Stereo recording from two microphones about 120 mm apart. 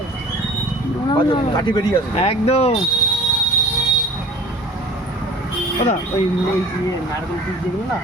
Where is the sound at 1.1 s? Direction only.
40° left (ahead or behind).